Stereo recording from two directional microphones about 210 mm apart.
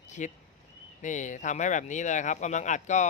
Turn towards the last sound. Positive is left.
turn(degrees=35)  # may be behind; listen again after turning